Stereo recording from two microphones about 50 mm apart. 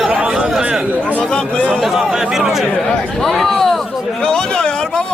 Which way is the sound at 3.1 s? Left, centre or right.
Centre.